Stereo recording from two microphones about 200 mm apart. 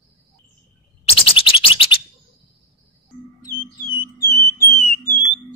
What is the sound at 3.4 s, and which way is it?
Music, 15° left (ahead or behind).